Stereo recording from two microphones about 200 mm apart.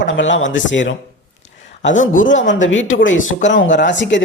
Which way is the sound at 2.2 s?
65° left (ahead or behind).